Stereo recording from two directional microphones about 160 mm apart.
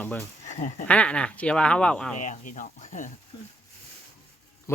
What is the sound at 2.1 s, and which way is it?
Speech, 50° left (ahead or behind).